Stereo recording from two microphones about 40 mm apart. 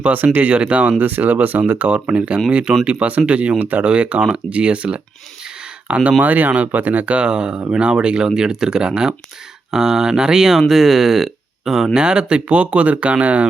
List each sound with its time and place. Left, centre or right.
0.5 s speech: right
1.0 s speech: right
1.9 s speech: right
3.6 s speech: right
3.8 s speech: right
7.3 s speech: right; by 11.9 s centre
11.9 s speech: right